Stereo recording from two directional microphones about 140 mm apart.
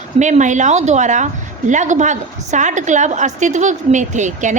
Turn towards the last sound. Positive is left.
turn(degrees=-60)  # may be behind; listen again after turning